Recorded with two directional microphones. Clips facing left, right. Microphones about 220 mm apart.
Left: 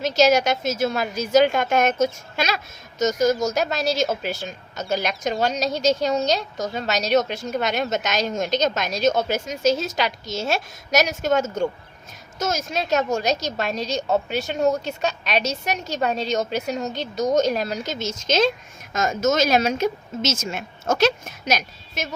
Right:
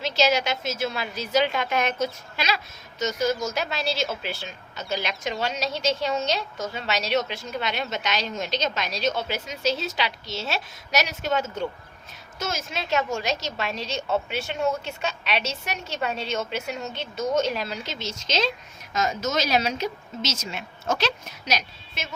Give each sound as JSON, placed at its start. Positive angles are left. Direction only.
{"t": 0.0, "sound": "a woman's voice", "side_deg": 45}